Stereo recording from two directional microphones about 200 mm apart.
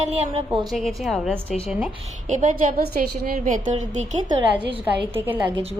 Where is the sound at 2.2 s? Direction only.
40° right (ahead or behind).